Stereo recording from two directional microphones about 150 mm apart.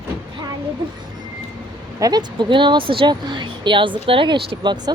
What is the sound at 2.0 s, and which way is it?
A woman's voice, 25° right (ahead or behind).